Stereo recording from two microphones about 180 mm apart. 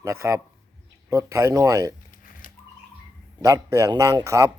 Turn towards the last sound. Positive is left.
turn(degrees=-15)  # may be behind; listen again after turning